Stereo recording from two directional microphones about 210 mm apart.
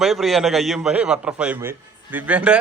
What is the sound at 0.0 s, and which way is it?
A man's voice, centre (ahead or behind).